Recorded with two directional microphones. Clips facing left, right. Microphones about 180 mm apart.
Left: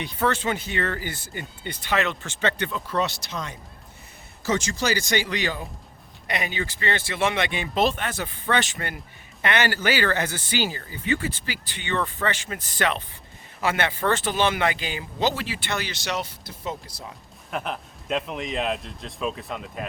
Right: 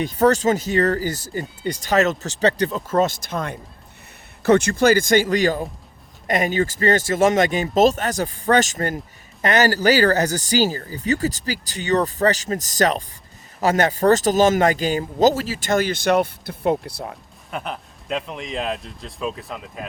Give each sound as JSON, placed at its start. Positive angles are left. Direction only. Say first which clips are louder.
{"t": 0.0, "sound": "speech", "louder": "right 8 dB", "side_deg": -45}
{"t": 17.5, "sound": "a man's voice", "louder": "even", "side_deg": 0}